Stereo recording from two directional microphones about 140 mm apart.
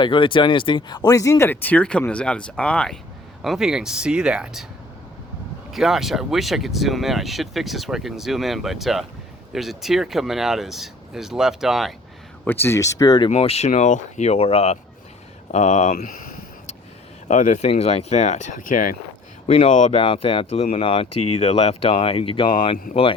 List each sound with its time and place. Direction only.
0.0 s speech: 35° left (ahead or behind); by 4.6 s 5° right (ahead or behind)
5.7 s speech: centre (ahead or behind)
12.5 s speech: 15° left (ahead or behind); by 13.3 s 30° left (ahead or behind)
13.3 s speech: 45° left (ahead or behind)
13.7 s speech: 60° left (ahead or behind); by 14.8 s 45° left (ahead or behind)
15.5 s speech: 55° left (ahead or behind); by 16.0 s 75° left (ahead or behind)
17.2 s speech: 65° left (ahead or behind)
19.5 s speech: 45° left (ahead or behind)